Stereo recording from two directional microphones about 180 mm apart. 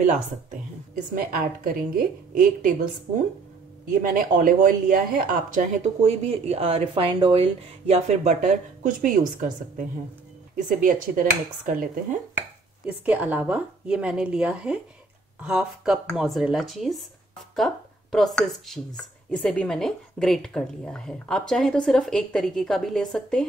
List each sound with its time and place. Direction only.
0.0 s a woman's voice: 45° right (ahead or behind)
3.9 s a woman's voice: 50° right (ahead or behind)
6.2 s a woman's voice: 35° right (ahead or behind); by 12.2 s 50° right (ahead or behind)
12.8 s a woman's voice: 10° right (ahead or behind)